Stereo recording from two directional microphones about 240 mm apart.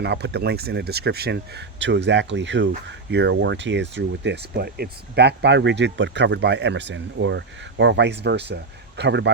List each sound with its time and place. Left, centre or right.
0.0 s speech: right